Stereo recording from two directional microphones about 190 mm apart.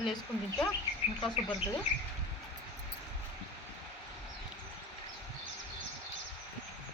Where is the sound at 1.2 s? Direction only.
25° left (ahead or behind).